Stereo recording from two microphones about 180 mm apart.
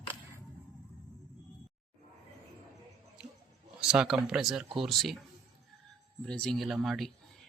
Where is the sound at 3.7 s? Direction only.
5° right (ahead or behind).